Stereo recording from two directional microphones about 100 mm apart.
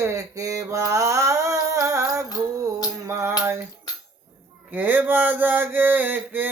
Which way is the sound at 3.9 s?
40° left (ahead or behind).